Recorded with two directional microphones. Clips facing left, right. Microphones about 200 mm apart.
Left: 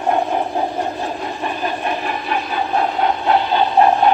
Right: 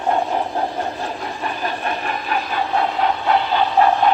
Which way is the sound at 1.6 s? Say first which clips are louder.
Left 2 dB; 15° left (ahead or behind).